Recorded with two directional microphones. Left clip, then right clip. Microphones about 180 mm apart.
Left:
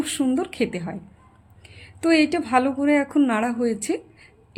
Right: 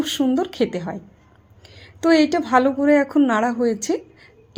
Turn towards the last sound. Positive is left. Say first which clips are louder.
# right 3 dB
turn(degrees=10)  # may be behind; listen again after turning